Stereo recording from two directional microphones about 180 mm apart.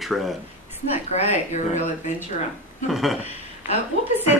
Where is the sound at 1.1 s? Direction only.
40° left (ahead or behind).